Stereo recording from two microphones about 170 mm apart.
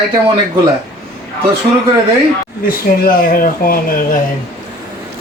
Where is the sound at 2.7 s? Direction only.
55° left (ahead or behind).